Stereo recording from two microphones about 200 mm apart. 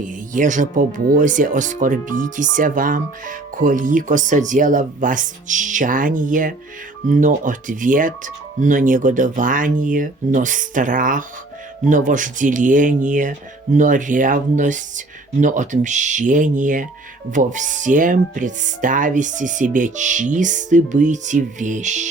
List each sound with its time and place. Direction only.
0.0 s speech: 40° right (ahead or behind)